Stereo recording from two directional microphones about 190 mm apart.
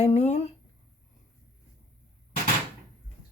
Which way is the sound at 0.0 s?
35° left (ahead or behind).